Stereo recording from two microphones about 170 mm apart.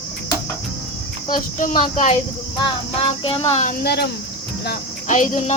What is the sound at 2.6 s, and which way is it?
Speech, 30° left (ahead or behind).